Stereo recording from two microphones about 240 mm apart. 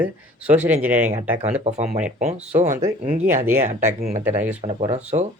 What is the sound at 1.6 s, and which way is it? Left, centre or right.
Speech, right.